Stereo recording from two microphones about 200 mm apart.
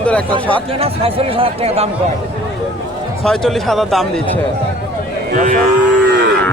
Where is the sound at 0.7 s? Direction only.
30° right (ahead or behind).